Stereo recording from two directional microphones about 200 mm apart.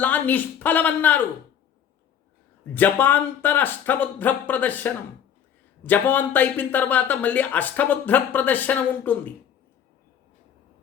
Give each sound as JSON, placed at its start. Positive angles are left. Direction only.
{"t": 0.0, "sound": "speech", "side_deg": 10}
{"t": 2.7, "sound": "speech", "side_deg": 10}